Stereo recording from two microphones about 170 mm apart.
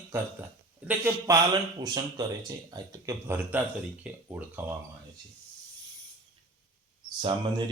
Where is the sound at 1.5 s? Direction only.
25° right (ahead or behind).